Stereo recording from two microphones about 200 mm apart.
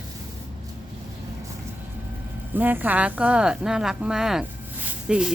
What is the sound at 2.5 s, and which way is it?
Speech, 10° right (ahead or behind).